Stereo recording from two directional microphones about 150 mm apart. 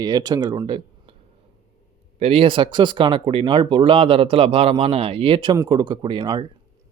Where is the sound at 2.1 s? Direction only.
40° right (ahead or behind).